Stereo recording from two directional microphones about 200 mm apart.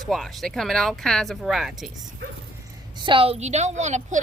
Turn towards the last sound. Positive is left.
turn(degrees=-35)  # may be behind; listen again after turning